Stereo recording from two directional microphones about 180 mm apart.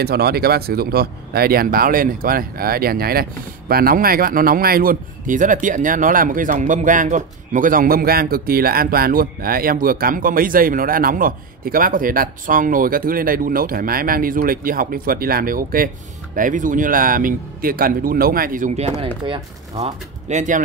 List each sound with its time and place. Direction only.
0.0 s speech: 60° right (ahead or behind)
18.8 s speech: 35° right (ahead or behind)